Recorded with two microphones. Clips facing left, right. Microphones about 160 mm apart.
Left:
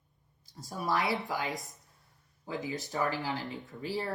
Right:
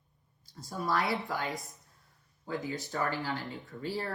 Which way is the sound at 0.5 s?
15° left (ahead or behind).